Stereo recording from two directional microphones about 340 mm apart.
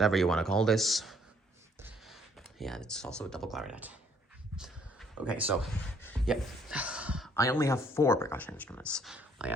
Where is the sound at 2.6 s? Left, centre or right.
Centre.